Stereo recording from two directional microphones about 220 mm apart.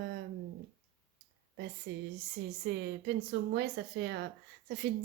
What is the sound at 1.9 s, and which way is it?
A woman's voice, 45° right (ahead or behind).